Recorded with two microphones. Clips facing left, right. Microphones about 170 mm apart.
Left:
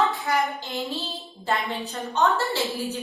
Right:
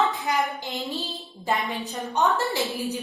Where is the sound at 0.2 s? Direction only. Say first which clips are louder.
Left 1 dB; 20° right (ahead or behind).